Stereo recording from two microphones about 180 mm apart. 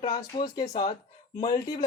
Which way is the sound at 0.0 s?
25° left (ahead or behind).